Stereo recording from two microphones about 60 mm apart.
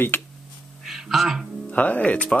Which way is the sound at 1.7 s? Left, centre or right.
Left.